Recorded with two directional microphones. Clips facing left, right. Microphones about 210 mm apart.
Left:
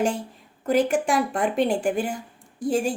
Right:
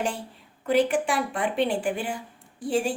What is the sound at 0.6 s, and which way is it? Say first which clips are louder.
A woman's voice: left 1 dB; 45° left (ahead or behind).